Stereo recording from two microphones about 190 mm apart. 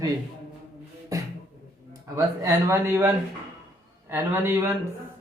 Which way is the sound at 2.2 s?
15° right (ahead or behind).